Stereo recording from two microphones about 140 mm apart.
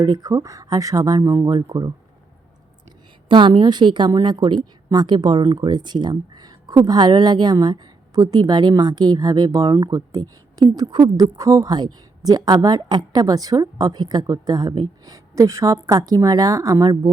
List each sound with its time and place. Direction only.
0.0 s a woman's voice: 25° right (ahead or behind)
3.2 s a woman's voice: 35° right (ahead or behind)